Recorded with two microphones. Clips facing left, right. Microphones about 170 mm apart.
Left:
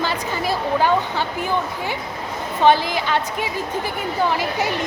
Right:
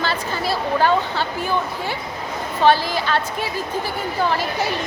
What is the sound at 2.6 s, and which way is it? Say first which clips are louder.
A woman's voice: left 1 dB; 15° left (ahead or behind).